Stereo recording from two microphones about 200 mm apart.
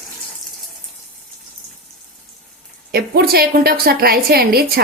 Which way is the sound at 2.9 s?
50° right (ahead or behind).